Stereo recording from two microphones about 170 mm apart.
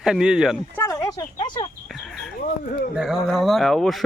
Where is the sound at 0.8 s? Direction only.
20° left (ahead or behind).